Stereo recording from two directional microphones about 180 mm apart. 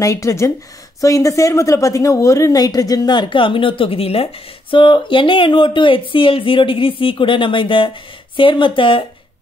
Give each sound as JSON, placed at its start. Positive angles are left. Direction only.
{"t": 0.0, "sound": "a woman's voice", "side_deg": 15}